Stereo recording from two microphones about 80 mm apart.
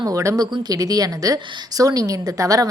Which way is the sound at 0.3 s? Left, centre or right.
Right.